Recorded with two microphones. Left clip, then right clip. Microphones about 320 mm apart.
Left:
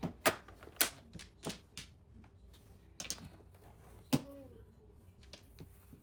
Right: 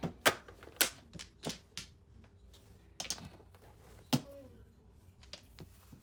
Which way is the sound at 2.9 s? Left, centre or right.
Centre.